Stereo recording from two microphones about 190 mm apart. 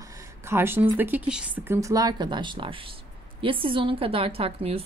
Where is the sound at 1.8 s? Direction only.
20° right (ahead or behind).